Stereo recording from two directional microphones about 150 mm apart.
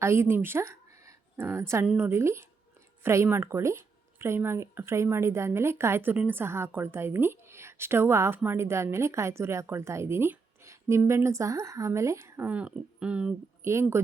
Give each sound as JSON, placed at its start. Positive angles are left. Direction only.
{"t": 0.0, "sound": "a woman's voice", "side_deg": -15}